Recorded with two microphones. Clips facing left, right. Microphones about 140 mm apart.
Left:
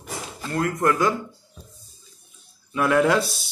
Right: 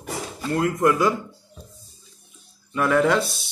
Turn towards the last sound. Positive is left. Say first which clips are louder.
# even
turn(degrees=0)  # may be behind; listen again after turning